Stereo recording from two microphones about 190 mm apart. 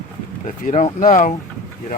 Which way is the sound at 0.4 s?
40° left (ahead or behind).